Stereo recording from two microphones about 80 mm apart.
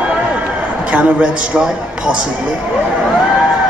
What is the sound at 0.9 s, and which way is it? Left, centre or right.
Speech, centre.